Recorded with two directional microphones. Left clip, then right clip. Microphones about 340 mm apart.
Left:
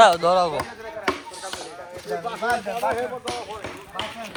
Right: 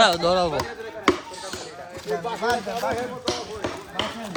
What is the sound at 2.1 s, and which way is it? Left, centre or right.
Speech, left.